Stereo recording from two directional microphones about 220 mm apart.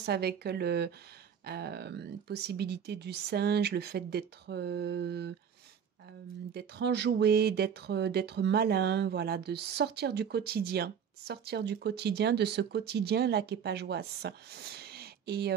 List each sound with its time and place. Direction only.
0.0 s speech: 45° right (ahead or behind)
6.5 s speech: 50° right (ahead or behind)